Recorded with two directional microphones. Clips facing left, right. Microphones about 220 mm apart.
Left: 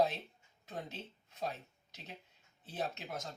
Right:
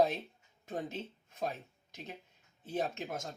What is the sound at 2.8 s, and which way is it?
Speech, 50° right (ahead or behind).